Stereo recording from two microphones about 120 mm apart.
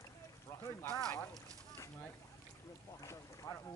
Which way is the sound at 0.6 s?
25° left (ahead or behind).